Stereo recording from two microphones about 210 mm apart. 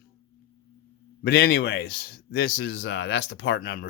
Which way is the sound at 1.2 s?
50° left (ahead or behind).